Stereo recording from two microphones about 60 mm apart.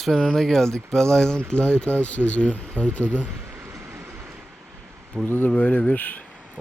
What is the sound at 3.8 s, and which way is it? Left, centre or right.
Train, right.